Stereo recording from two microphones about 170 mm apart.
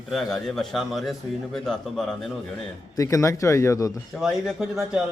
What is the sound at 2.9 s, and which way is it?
Speech, 20° left (ahead or behind).